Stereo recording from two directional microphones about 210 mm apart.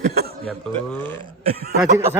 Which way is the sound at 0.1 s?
50° right (ahead or behind).